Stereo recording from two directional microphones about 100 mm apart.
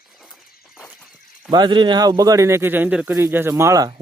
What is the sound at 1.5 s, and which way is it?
Speech, 50° right (ahead or behind).